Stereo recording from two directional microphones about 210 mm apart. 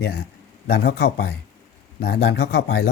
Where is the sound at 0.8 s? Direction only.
50° left (ahead or behind).